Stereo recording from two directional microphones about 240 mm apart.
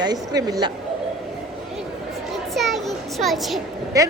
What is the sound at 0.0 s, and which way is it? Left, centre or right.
Speech, centre.